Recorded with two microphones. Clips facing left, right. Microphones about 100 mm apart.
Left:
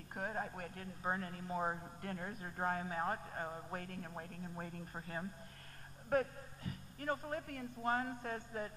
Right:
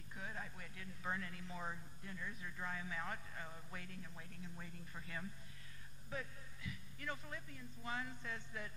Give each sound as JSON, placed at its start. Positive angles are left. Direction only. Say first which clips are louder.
{"t": 0.1, "sound": "speech", "louder": "left 8 dB", "side_deg": 50}
{"t": 2.0, "sound": "speech", "louder": "left 6 dB", "side_deg": 55}
{"t": 6.1, "sound": "speech", "louder": "left 13 dB", "side_deg": 55}
{"t": 6.6, "sound": "speech", "louder": "left 5 dB", "side_deg": 45}